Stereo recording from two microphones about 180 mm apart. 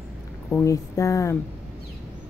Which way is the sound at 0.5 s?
15° left (ahead or behind).